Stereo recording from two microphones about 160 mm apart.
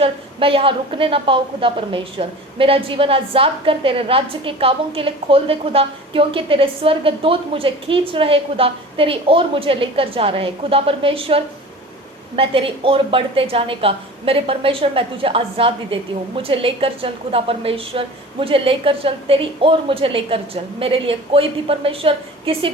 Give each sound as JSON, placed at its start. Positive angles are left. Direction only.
{"t": 0.0, "sound": "a woman's voice", "side_deg": -35}